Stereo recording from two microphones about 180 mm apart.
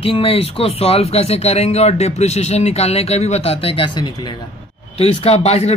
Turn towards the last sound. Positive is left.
turn(degrees=35)  # may be behind; listen again after turning